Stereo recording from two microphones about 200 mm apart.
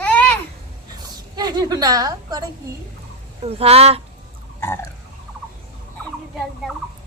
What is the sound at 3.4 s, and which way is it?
Speech, 30° right (ahead or behind).